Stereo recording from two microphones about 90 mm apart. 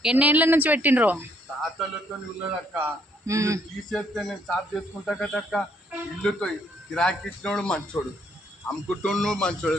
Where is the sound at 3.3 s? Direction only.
35° right (ahead or behind).